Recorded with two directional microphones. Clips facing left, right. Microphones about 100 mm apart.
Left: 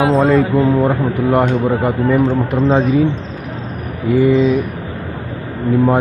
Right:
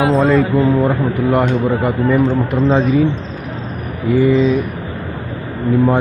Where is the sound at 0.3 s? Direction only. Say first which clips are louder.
Even; 45° left (ahead or behind).